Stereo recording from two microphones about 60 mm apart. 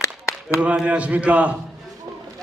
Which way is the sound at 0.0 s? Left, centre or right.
Left.